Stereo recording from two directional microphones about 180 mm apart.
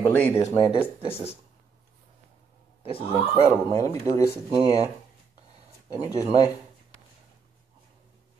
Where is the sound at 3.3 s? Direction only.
30° right (ahead or behind).